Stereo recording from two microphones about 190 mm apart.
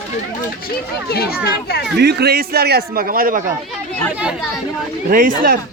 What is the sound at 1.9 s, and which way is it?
A man's voice, 60° right (ahead or behind).